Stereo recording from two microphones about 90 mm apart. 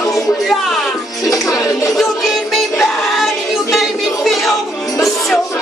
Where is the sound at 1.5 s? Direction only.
40° left (ahead or behind).